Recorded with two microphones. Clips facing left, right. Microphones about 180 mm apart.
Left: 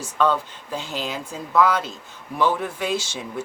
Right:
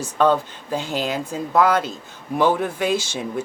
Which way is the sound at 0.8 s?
60° right (ahead or behind).